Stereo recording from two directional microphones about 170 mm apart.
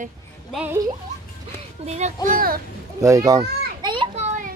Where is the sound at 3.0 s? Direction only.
20° right (ahead or behind).